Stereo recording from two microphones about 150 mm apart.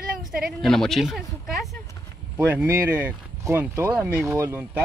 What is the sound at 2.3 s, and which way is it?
Speech, 15° right (ahead or behind).